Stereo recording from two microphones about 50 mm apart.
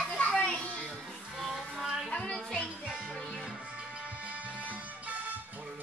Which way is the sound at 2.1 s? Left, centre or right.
Centre.